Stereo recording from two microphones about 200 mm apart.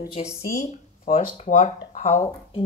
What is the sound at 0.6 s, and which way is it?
Speech, 40° left (ahead or behind).